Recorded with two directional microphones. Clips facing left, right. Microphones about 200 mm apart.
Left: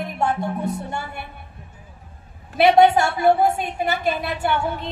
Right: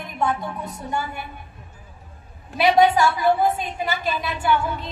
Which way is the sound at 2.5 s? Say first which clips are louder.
Left 3 dB; 60° left (ahead or behind).